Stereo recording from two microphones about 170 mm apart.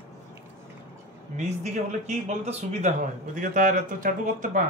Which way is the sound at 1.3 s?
45° right (ahead or behind).